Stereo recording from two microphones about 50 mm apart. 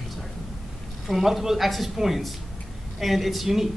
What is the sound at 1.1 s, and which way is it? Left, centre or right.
Speech, centre.